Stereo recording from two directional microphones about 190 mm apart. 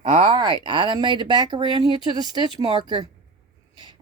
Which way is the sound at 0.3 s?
25° right (ahead or behind).